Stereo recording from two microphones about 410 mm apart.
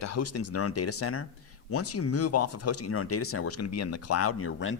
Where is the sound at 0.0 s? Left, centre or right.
Left.